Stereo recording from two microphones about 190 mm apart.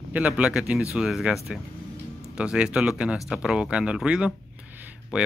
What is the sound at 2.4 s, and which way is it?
Speech, 5° right (ahead or behind).